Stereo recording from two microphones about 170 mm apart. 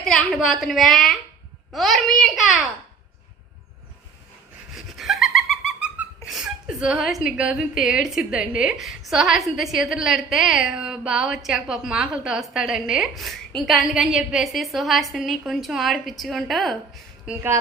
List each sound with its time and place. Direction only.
0.0 s a woman's voice: centre (ahead or behind)
4.7 s a sound: centre (ahead or behind)
6.3 s a woman's voice: 5° right (ahead or behind)